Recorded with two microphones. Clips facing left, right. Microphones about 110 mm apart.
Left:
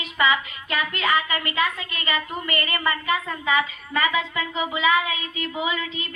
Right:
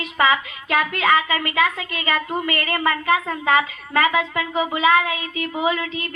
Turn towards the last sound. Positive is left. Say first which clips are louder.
# right 5 dB
turn(degrees=-55)  # may be behind; listen again after turning